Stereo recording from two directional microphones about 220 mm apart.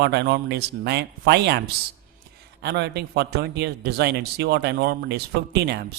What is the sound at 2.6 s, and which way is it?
Speech, 50° right (ahead or behind).